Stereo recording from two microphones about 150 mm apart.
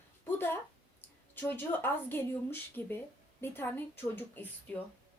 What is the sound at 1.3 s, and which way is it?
Speech, 15° left (ahead or behind).